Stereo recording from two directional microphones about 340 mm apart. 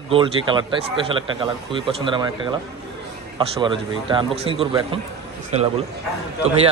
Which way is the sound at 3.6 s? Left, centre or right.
Centre.